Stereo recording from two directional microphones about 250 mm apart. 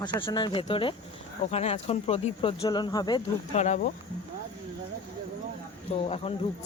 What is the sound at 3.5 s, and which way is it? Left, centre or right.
Speech, left.